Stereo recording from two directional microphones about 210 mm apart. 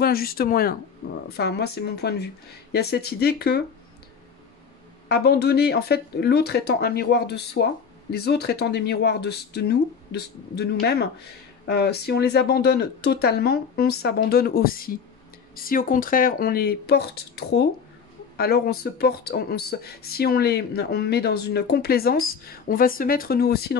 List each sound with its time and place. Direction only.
0.0 s speech: 45° left (ahead or behind)
5.0 s speech: 50° left (ahead or behind)